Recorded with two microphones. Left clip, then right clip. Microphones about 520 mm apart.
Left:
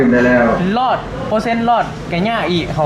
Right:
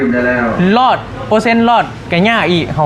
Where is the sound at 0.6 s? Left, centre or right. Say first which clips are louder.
Right 5 dB; right.